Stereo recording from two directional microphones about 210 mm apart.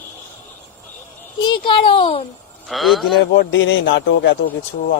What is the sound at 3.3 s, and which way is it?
A man's voice, 65° left (ahead or behind).